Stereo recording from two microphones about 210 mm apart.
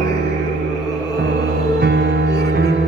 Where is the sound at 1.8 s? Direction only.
50° right (ahead or behind).